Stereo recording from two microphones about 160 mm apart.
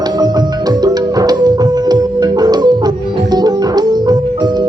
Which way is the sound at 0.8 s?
25° right (ahead or behind).